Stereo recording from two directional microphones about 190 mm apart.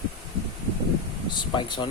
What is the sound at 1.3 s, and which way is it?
Air conditioning, 25° left (ahead or behind).